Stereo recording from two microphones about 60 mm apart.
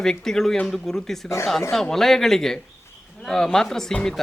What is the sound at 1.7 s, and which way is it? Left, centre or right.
Speech, centre.